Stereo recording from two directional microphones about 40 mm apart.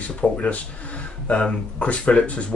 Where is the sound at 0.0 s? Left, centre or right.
Left.